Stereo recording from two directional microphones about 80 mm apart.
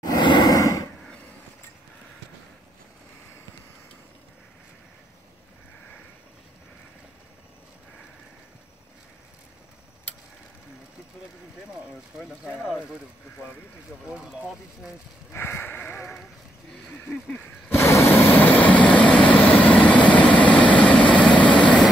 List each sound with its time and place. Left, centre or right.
0.0 s sigh: left
14.0 s speech: centre
15.3 s a sound: left
17.6 s vehicle: left; by 21.8 s centre